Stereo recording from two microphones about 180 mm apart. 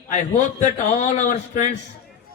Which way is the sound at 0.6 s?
40° left (ahead or behind).